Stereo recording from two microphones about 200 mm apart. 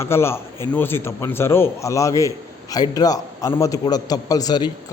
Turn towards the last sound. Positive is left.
turn(degrees=20)  # may be behind; listen again after turning